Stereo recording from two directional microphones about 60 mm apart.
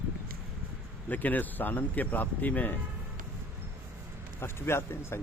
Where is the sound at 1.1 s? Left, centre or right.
Left.